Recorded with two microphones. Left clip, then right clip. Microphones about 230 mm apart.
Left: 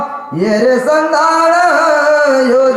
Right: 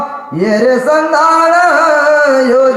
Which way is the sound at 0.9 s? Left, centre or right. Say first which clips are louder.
Right 2 dB; centre.